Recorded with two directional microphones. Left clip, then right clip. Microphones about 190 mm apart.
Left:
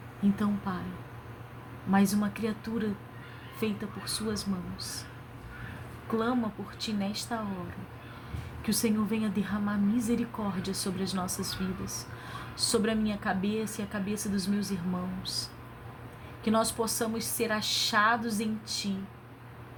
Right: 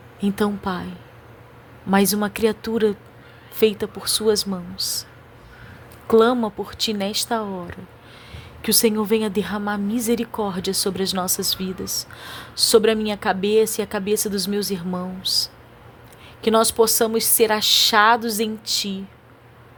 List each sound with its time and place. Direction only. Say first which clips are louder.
0.3 s a woman's voice: right 11 dB; 65° right (ahead or behind)
1.9 s a woman's voice: right 9 dB; 65° right (ahead or behind)
6.1 s a woman's voice: right 15 dB; 65° right (ahead or behind)
8.6 s a woman's voice: right 12 dB; 65° right (ahead or behind)